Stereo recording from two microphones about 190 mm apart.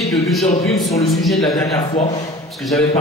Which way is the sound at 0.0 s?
Centre (ahead or behind).